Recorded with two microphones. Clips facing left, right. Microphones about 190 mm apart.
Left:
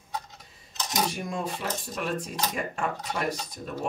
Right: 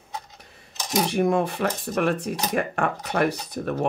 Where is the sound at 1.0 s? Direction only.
65° right (ahead or behind).